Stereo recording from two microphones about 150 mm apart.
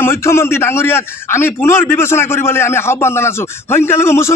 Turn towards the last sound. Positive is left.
turn(degrees=15)  # may be behind; listen again after turning